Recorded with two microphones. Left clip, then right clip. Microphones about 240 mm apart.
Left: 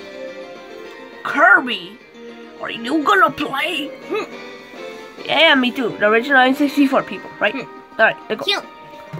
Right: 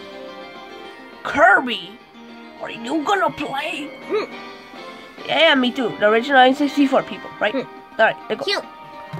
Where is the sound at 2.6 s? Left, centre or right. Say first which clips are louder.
Left 4 dB; centre.